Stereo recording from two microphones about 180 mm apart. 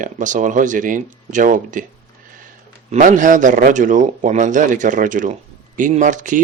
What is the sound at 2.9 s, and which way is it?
Speech, 45° right (ahead or behind).